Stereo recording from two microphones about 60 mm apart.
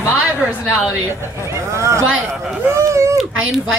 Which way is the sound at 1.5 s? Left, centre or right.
Right.